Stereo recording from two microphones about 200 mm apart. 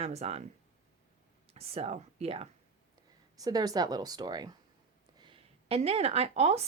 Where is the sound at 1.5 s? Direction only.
30° right (ahead or behind).